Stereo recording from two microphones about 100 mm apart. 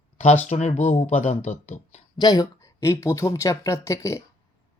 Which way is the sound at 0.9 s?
90° left.